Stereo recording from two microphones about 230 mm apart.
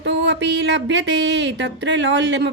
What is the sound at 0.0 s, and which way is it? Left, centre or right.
A woman's voice, right.